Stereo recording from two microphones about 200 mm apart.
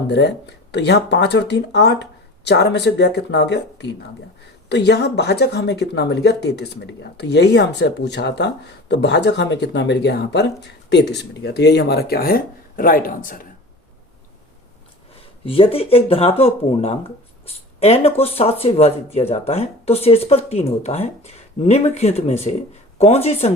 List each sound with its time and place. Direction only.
0.1 s speech: 55° left (ahead or behind)
15.4 s speech: 25° left (ahead or behind)